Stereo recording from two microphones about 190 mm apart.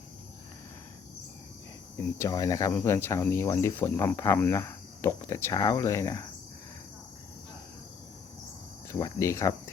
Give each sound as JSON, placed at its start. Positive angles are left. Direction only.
{"t": 2.1, "sound": "speech", "side_deg": 15}
{"t": 8.9, "sound": "speech", "side_deg": 20}